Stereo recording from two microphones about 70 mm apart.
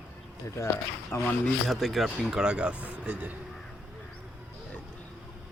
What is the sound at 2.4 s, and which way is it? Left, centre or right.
Speech, centre.